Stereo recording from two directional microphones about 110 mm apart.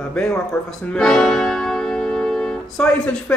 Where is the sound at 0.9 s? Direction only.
5° left (ahead or behind).